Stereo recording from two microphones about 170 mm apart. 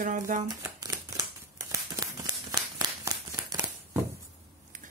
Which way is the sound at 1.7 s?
20° right (ahead or behind).